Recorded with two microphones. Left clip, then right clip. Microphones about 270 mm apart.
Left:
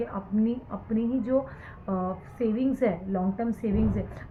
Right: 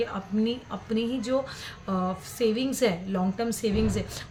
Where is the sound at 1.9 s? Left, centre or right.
Right.